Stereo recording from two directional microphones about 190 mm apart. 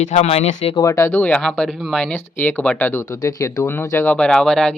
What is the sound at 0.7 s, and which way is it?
Speech, 15° left (ahead or behind).